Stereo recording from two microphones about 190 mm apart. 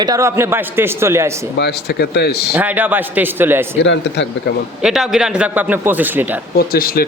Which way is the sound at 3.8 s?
65° left (ahead or behind).